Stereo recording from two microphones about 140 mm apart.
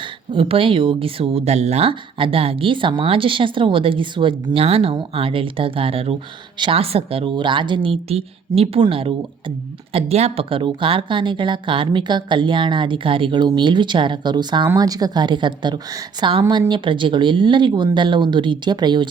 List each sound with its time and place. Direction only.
0.0 s speech: 40° right (ahead or behind)